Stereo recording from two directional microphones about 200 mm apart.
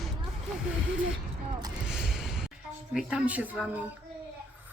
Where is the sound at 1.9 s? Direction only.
Centre (ahead or behind).